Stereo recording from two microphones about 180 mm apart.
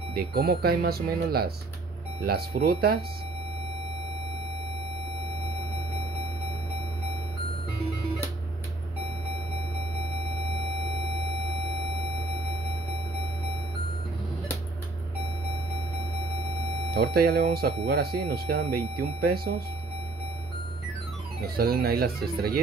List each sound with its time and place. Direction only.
0.1 s speech: 60° right (ahead or behind)
16.9 s speech: 60° right (ahead or behind)
21.4 s speech: 60° right (ahead or behind)